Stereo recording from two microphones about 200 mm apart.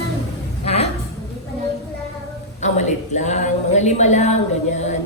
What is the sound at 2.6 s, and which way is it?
A woman's voice, 35° left (ahead or behind).